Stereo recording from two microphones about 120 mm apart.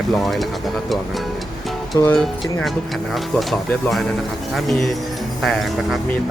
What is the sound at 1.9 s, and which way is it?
Music, 20° left (ahead or behind).